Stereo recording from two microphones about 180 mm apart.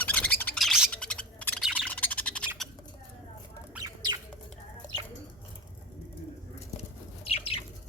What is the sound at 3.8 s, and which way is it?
Bird, 25° right (ahead or behind).